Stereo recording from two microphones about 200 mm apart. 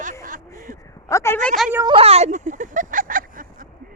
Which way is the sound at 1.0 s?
15° left (ahead or behind).